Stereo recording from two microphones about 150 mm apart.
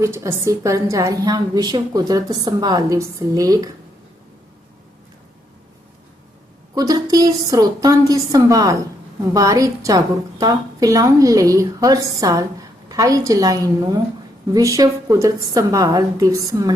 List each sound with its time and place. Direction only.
0.0 s a woman's voice: 20° right (ahead or behind)
6.7 s a woman's voice: 25° right (ahead or behind)